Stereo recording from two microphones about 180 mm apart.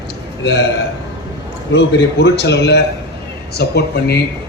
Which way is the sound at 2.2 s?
70° left (ahead or behind).